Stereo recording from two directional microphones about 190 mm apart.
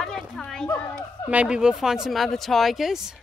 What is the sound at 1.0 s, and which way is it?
Speech, 5° right (ahead or behind).